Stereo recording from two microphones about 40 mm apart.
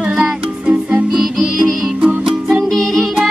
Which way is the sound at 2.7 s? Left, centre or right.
Centre.